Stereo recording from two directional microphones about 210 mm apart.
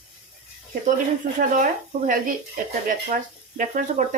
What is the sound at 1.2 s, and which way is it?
Speech, 50° right (ahead or behind).